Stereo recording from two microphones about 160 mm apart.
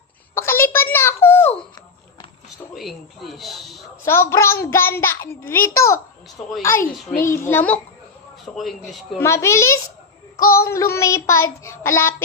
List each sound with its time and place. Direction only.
0.3 s a sound: 15° left (ahead or behind)
2.7 s speech: centre (ahead or behind)
4.0 s child singing: 15° left (ahead or behind)
6.4 s a child's voice: 5° left (ahead or behind)
7.2 s child singing: 15° left (ahead or behind)
8.5 s a child's voice: 5° left (ahead or behind)
9.1 s child singing: 15° left (ahead or behind)